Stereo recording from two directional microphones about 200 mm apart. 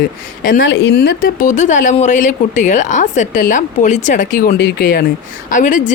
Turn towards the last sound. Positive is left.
turn(degrees=40)  # may be behind; listen again after turning